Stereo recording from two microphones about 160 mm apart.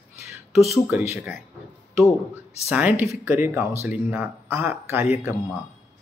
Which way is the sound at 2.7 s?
10° right (ahead or behind).